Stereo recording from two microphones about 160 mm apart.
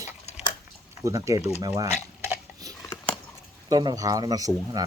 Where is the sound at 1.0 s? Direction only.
20° right (ahead or behind).